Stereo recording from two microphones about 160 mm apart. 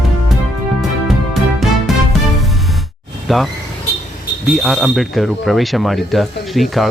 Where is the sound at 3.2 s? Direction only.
Centre (ahead or behind).